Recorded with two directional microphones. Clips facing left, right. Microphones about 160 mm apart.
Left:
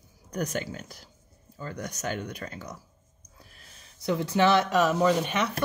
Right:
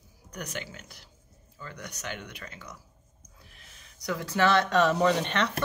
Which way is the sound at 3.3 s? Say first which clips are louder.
Left 2 dB; 40° left (ahead or behind).